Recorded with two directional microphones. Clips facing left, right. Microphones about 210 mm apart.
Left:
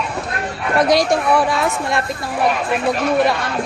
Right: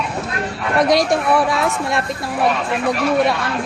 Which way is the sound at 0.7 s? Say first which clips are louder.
Even; centre (ahead or behind).